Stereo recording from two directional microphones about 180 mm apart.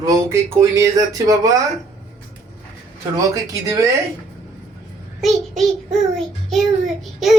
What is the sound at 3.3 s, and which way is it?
Speech, 20° right (ahead or behind).